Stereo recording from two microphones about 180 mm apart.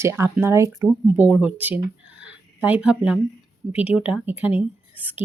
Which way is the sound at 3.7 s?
10° right (ahead or behind).